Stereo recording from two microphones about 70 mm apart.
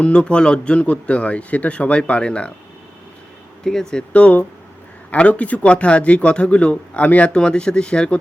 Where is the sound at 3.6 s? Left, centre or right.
Centre.